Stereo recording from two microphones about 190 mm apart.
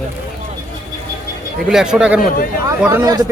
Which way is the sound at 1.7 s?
5° right (ahead or behind).